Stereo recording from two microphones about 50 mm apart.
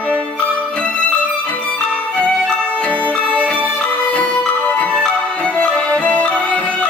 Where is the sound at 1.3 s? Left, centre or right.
Left.